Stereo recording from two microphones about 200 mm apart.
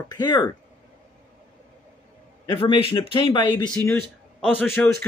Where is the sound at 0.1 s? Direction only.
20° left (ahead or behind).